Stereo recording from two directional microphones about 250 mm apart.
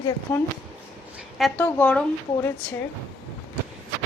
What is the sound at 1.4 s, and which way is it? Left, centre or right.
A woman's voice, centre.